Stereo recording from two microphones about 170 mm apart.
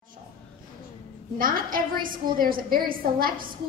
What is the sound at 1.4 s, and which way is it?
A woman's voice, 55° right (ahead or behind).